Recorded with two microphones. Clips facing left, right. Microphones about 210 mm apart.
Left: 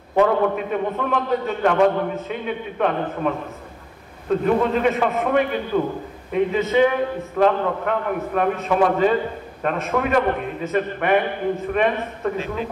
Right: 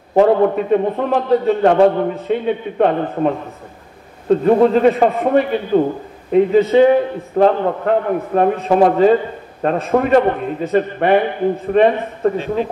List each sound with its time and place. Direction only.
0.1 s a man's voice: 30° right (ahead or behind)